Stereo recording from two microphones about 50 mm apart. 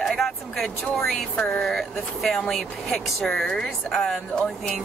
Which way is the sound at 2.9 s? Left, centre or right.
Centre.